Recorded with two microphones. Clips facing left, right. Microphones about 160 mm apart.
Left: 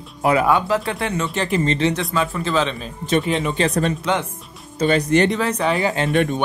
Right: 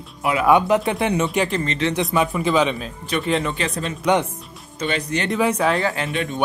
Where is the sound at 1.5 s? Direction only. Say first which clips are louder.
Left 4 dB; 25° left (ahead or behind).